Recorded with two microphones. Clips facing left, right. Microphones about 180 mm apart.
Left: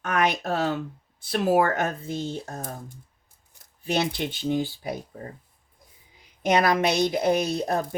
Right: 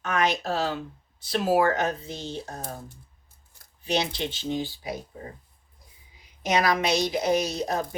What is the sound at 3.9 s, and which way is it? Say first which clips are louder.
Speech: left 1 dB; 55° left (ahead or behind).